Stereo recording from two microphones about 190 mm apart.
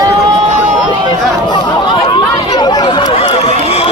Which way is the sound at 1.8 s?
20° left (ahead or behind).